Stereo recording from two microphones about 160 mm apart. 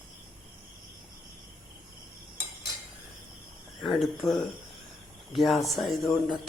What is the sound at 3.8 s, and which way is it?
Speech, centre (ahead or behind).